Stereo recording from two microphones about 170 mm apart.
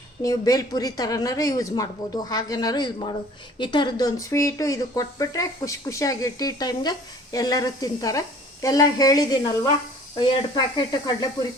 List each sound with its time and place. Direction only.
0.2 s speech: 20° left (ahead or behind)